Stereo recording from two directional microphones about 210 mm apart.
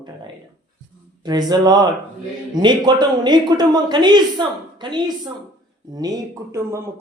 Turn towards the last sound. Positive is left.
turn(degrees=-15)  # may be behind; listen again after turning